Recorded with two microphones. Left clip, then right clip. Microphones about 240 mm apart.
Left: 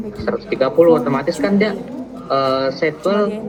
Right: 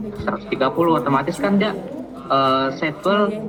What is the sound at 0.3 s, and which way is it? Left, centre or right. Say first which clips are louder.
A man's voice: left 3 dB; centre.